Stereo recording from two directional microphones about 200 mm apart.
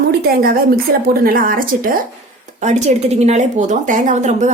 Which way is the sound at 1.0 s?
45° right (ahead or behind).